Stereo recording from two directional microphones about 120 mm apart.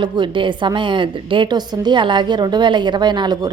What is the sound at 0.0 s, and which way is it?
A woman's voice, 40° right (ahead or behind).